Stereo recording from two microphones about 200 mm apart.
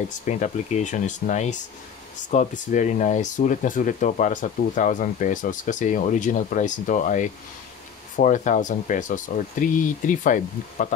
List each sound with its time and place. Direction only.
0.3 s speech: 35° left (ahead or behind)